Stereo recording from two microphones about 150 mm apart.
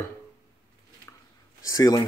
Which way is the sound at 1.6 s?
25° left (ahead or behind).